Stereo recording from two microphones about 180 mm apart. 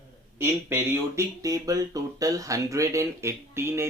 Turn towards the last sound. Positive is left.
turn(degrees=-15)  # may be behind; listen again after turning